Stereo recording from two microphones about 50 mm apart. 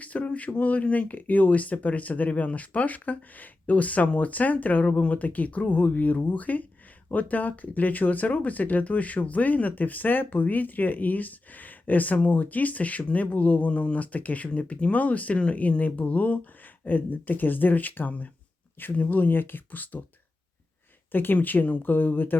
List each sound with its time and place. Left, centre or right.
0.0 s speech: left
21.1 s speech: left